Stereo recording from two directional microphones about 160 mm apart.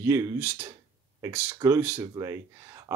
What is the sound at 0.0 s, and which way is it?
Speech, 15° right (ahead or behind).